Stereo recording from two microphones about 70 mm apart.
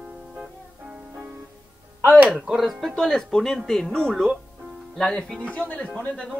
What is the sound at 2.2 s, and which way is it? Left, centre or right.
Speech, centre.